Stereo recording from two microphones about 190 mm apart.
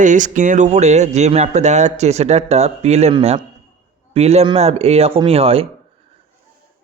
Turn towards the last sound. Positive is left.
turn(degrees=-30)  # may be behind; listen again after turning